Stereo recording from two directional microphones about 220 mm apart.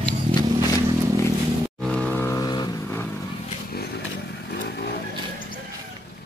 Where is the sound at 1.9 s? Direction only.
5° left (ahead or behind).